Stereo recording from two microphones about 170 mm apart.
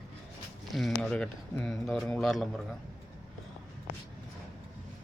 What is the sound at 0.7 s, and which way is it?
Speech, 5° left (ahead or behind).